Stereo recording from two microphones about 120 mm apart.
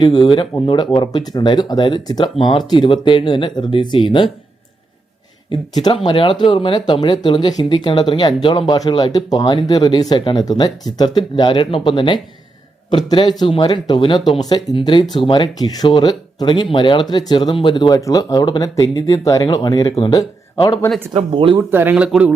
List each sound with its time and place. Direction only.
0.0 s speech: 40° left (ahead or behind)
5.5 s speech: 45° left (ahead or behind)
21.1 s speech: 45° right (ahead or behind)
21.7 s speech: 15° right (ahead or behind)